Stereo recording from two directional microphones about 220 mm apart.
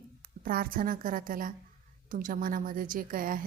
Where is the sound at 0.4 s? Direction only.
40° right (ahead or behind).